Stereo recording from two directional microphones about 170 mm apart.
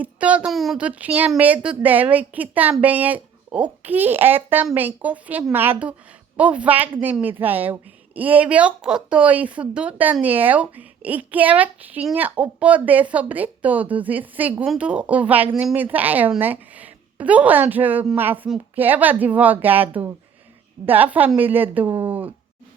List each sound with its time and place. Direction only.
0.0 s a woman's voice: 5° right (ahead or behind)